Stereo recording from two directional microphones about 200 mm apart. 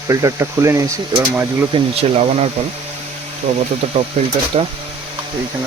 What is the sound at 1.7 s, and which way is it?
Speech, 30° right (ahead or behind).